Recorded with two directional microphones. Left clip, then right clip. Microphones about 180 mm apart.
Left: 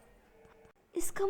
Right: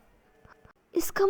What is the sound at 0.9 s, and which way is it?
Speech, 20° right (ahead or behind).